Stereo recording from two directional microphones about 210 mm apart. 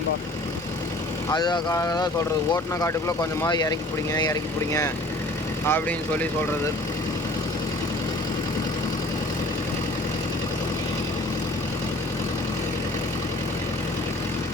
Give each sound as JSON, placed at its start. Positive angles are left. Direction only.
{"t": 1.3, "sound": "speech", "side_deg": 20}